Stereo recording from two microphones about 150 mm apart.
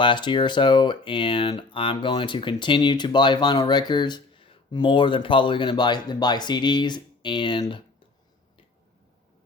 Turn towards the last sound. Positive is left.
turn(degrees=35)  # may be behind; listen again after turning